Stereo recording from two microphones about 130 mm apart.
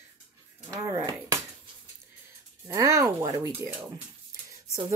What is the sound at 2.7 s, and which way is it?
Speech, 25° right (ahead or behind).